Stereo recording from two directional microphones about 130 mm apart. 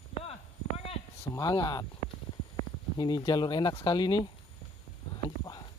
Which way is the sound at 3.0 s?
35° left (ahead or behind).